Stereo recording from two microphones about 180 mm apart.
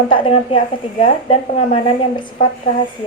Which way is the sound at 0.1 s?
30° left (ahead or behind).